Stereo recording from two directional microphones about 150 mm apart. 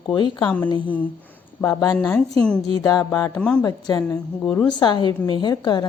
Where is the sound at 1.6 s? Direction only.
20° left (ahead or behind).